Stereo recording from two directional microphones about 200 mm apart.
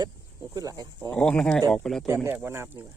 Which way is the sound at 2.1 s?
10° right (ahead or behind).